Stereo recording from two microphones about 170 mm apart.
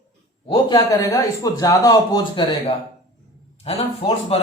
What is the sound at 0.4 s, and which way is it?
A man's voice, 25° left (ahead or behind).